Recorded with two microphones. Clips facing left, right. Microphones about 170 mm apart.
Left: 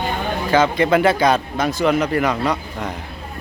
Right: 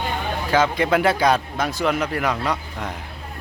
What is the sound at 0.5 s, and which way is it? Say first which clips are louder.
Speech: left 3 dB; 5° right (ahead or behind).